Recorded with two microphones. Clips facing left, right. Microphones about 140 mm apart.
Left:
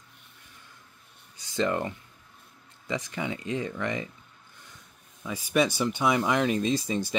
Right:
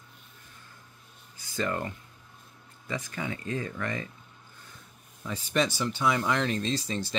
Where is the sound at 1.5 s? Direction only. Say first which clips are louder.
Left 4 dB; 20° left (ahead or behind).